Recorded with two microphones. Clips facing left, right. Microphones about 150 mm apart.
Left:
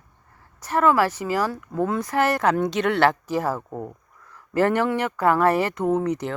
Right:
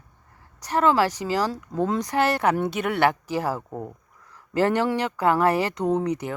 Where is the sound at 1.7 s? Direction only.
20° right (ahead or behind).